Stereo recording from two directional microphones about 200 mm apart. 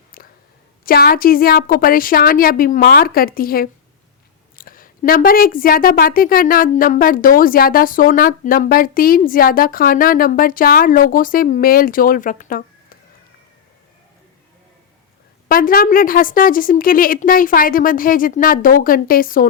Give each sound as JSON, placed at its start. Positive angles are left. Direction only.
{"t": 0.2, "sound": "a sound", "side_deg": 45}
{"t": 0.9, "sound": "a woman's voice", "side_deg": 50}
{"t": 15.4, "sound": "a woman's voice", "side_deg": 45}